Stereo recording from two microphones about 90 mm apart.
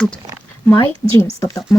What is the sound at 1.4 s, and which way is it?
Speech, 40° left (ahead or behind).